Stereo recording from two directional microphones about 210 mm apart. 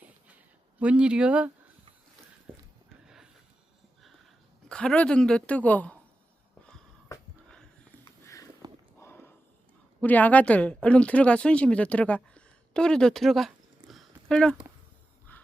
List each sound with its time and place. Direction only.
0.8 s a woman's voice: 5° right (ahead or behind)
4.7 s a woman's voice: 5° left (ahead or behind)
8.0 s sniff: 15° left (ahead or behind)
9.0 s walk: 10° left (ahead or behind)
10.0 s a woman's voice: 5° left (ahead or behind)
15.3 s dog: 10° left (ahead or behind)